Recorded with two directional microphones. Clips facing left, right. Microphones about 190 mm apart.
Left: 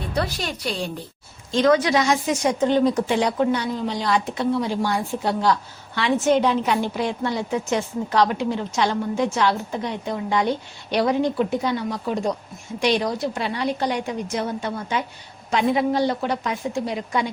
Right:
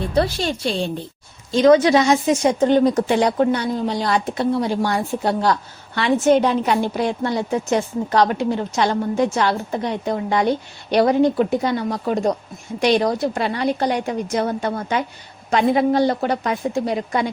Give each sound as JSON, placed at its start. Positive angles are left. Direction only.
{"t": 0.1, "sound": "speech", "side_deg": -30}
{"t": 2.6, "sound": "a woman's voice", "side_deg": -45}
{"t": 4.8, "sound": "a woman's voice", "side_deg": -60}